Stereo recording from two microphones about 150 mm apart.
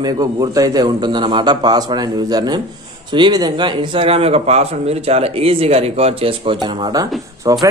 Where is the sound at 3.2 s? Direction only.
25° right (ahead or behind).